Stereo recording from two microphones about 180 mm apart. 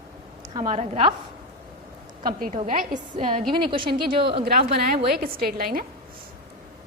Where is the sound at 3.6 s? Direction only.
30° right (ahead or behind).